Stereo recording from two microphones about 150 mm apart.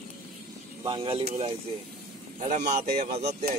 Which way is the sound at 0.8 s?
35° right (ahead or behind).